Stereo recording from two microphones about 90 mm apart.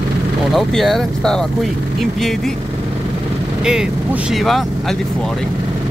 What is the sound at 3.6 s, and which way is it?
Speech, 5° right (ahead or behind).